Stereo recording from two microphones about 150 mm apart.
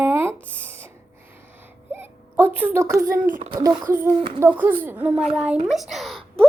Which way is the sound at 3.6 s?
20° right (ahead or behind).